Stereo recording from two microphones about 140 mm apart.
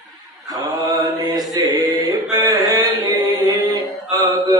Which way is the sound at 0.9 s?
30° right (ahead or behind).